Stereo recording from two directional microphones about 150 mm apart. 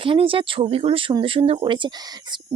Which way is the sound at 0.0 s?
35° right (ahead or behind).